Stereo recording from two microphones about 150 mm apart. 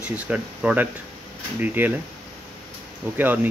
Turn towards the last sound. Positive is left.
turn(degrees=-10)  # may be behind; listen again after turning